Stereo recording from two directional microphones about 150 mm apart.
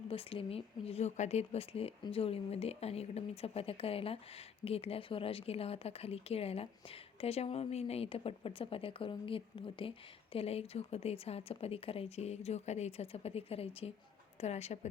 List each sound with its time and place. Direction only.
0.1 s speech: 40° left (ahead or behind)